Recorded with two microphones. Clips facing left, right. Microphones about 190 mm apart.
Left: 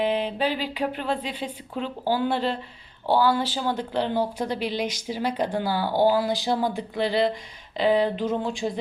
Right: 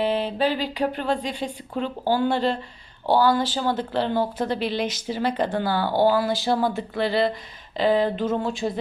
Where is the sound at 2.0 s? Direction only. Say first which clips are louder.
Right 2 dB; 5° left (ahead or behind).